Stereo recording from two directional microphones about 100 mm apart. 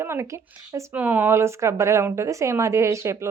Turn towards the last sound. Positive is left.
turn(degrees=-30)  # may be behind; listen again after turning